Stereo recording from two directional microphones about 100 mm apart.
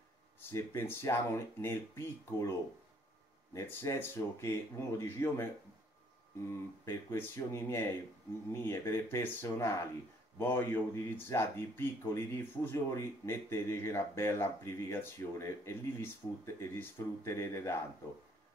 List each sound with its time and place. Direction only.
0.5 s speech: 25° left (ahead or behind)
3.5 s speech: 30° left (ahead or behind)